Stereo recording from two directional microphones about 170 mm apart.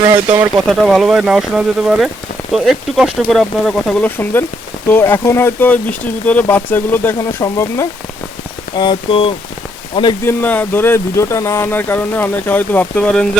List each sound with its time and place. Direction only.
0.7 s speech: centre (ahead or behind); by 10.2 s 30° left (ahead or behind)
10.2 s speech: 10° left (ahead or behind)